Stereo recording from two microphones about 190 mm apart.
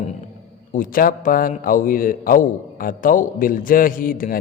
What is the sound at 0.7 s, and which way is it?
A man's voice, 45° left (ahead or behind).